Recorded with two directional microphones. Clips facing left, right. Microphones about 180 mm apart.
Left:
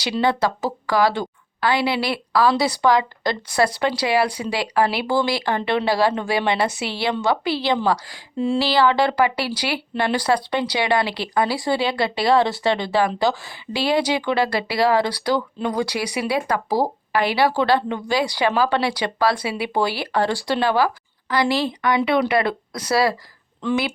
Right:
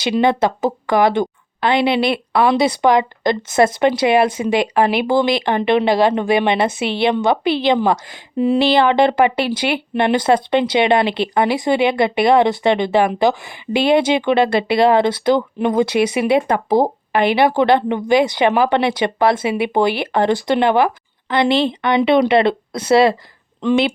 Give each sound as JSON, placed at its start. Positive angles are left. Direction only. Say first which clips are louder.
{"t": 0.0, "sound": "a woman's voice", "louder": "right 5 dB", "side_deg": -20}